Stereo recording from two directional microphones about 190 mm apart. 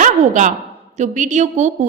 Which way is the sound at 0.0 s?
40° right (ahead or behind).